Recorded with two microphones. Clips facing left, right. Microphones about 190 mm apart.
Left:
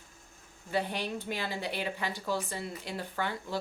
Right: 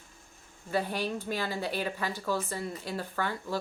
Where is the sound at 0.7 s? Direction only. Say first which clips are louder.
Right 2 dB; 20° left (ahead or behind).